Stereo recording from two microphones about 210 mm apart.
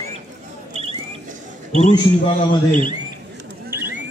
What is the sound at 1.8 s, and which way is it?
Speech, 25° left (ahead or behind).